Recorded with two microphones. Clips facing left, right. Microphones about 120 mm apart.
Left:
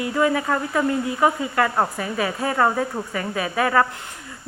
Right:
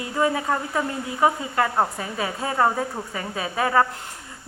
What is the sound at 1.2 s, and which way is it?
A woman's voice, 30° right (ahead or behind).